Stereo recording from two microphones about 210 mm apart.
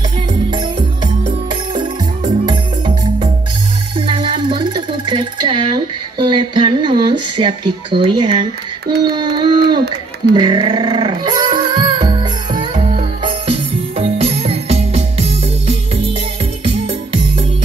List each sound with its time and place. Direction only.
0.3 s music: 20° right (ahead or behind)
0.7 s music: 35° right (ahead or behind)
2.4 s music: 20° right (ahead or behind)
3.9 s a sound: 25° right (ahead or behind)
6.1 s speech: 20° right (ahead or behind)
10.3 s music: 20° right (ahead or behind)